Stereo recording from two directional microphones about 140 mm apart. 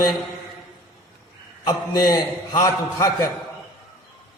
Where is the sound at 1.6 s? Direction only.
25° left (ahead or behind).